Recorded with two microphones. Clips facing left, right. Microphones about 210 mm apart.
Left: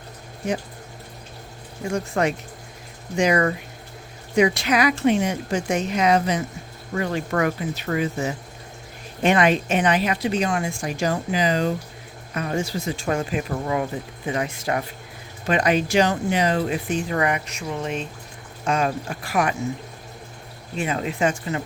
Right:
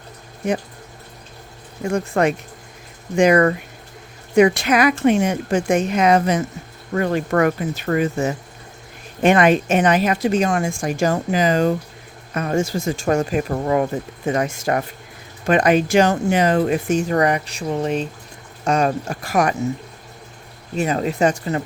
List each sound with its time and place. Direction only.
1.9 s speech: 55° right (ahead or behind)
20.7 s speech: 40° right (ahead or behind)